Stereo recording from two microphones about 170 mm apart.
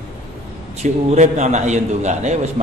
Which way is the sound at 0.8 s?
40° right (ahead or behind).